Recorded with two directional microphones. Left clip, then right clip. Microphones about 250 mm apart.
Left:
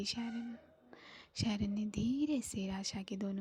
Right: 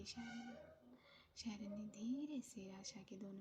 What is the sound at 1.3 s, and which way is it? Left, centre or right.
A woman's voice, left.